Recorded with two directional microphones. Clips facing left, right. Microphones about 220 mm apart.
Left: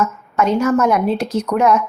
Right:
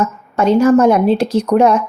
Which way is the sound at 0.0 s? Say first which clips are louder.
Right 3 dB; 30° right (ahead or behind).